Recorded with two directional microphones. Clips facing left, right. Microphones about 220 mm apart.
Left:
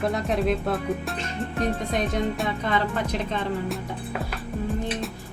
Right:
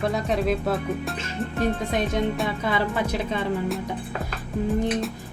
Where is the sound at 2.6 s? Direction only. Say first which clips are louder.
Right 1 dB; 15° right (ahead or behind).